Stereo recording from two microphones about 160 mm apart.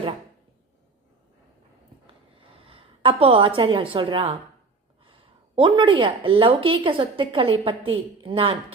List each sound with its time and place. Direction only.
2.6 s a woman's voice: 35° right (ahead or behind)
5.5 s a woman's voice: 30° right (ahead or behind)